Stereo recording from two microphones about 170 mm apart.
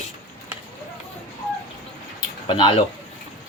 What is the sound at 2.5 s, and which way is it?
Speech, 30° left (ahead or behind).